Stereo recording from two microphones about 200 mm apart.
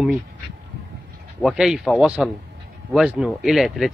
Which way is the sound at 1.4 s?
Centre (ahead or behind).